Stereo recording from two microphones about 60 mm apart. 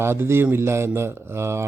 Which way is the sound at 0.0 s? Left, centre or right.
Right.